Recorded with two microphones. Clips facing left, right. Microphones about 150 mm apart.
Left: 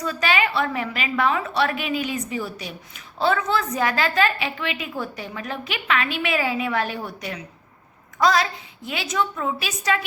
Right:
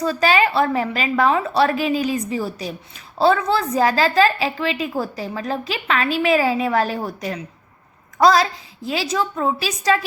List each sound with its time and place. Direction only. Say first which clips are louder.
0.0 s a woman's voice: right 5 dB; 35° right (ahead or behind)